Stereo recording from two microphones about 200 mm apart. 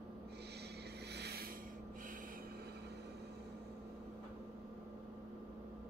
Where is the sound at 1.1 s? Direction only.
55° right (ahead or behind).